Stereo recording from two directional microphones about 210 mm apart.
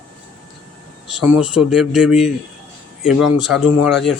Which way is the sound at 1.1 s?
5° right (ahead or behind).